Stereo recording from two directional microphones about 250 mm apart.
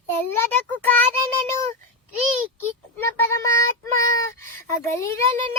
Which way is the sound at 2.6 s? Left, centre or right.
Centre.